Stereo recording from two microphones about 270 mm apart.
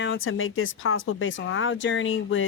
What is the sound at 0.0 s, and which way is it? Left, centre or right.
Speech, left.